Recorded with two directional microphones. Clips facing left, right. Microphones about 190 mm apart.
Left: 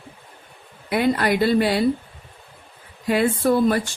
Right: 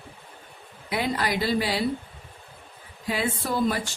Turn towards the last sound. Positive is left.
turn(degrees=55)  # may be behind; listen again after turning